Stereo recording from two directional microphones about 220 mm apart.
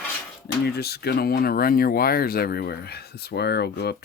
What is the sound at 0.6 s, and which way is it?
Speech, 45° left (ahead or behind).